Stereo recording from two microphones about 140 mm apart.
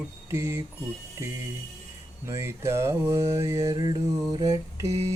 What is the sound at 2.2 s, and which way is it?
Mantra, 20° right (ahead or behind).